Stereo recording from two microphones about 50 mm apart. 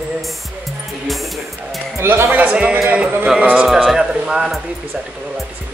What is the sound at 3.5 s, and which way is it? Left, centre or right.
Speech, centre.